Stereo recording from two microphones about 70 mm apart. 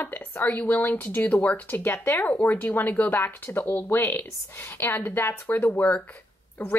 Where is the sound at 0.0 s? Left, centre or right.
Left.